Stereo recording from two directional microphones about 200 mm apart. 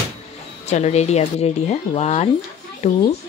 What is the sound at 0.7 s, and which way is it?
Speech, 35° left (ahead or behind).